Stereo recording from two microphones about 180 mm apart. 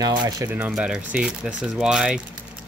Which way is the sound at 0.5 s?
5° right (ahead or behind).